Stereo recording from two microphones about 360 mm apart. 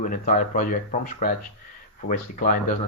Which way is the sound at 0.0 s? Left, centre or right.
Left.